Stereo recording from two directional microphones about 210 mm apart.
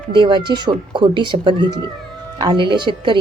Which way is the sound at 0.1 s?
25° right (ahead or behind).